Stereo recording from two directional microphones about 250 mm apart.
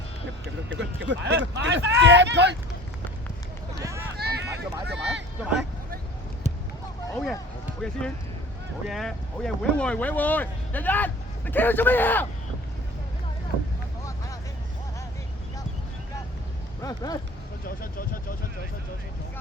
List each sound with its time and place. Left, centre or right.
0.7 s speech: right
3.8 s run: centre
4.2 s a sound: right
7.1 s speech: centre
16.8 s speech: centre
17.7 s speech: left